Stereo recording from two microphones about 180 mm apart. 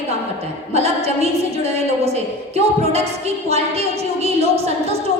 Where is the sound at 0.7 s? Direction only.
35° right (ahead or behind).